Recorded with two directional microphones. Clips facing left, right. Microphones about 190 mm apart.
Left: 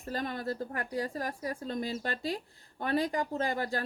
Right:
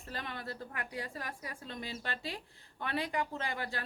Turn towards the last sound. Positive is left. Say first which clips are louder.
# left 7 dB
turn(degrees=40)  # may be behind; listen again after turning